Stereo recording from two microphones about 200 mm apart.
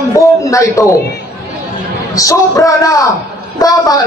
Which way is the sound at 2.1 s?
15° left (ahead or behind).